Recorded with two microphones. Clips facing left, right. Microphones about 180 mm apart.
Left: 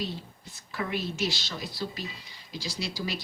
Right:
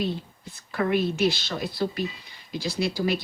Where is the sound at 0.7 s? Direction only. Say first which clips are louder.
Right 8 dB; 55° right (ahead or behind).